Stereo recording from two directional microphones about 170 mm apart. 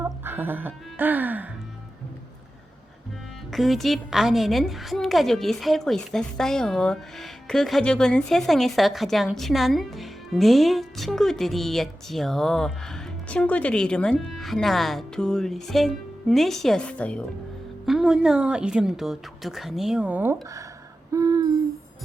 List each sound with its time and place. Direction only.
0.0 s speech: 10° right (ahead or behind)
3.5 s a woman's voice: centre (ahead or behind); by 20.7 s 15° right (ahead or behind)
21.1 s a sound: 20° right (ahead or behind)